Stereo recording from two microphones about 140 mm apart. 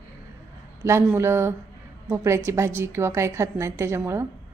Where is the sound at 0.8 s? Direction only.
20° right (ahead or behind).